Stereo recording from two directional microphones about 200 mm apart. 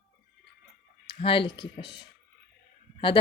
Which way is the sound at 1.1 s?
25° left (ahead or behind).